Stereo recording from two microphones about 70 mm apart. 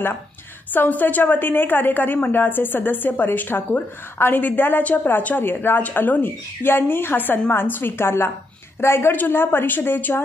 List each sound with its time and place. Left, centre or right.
0.7 s a woman's voice: left